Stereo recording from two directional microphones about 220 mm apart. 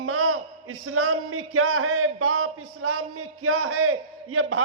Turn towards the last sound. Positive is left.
turn(degrees=-80)